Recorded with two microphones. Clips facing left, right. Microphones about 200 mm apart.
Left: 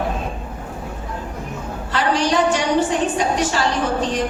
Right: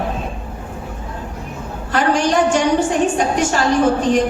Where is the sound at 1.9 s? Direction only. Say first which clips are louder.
Right 3 dB; 50° right (ahead or behind).